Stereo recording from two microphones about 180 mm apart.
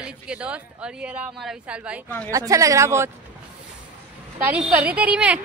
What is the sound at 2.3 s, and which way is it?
Speech, 20° right (ahead or behind).